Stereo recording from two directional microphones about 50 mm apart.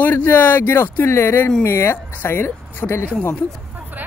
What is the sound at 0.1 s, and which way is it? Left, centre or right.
Speech, left.